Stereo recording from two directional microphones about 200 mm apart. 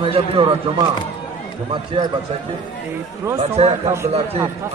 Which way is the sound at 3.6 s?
30° right (ahead or behind).